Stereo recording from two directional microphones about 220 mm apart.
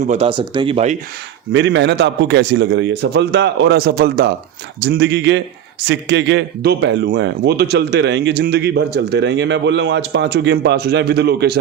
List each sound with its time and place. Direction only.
0.0 s speech: 30° right (ahead or behind)
1.5 s speech: 55° right (ahead or behind)